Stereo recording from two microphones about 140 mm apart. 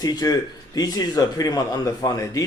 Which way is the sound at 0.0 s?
30° left (ahead or behind).